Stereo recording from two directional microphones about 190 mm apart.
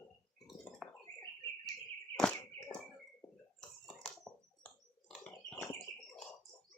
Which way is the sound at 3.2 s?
5° left (ahead or behind).